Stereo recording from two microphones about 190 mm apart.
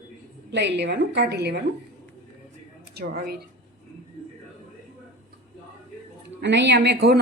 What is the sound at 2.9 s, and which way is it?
Speech, 55° right (ahead or behind).